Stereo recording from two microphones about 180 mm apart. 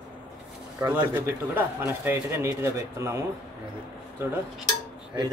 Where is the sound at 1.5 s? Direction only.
10° right (ahead or behind).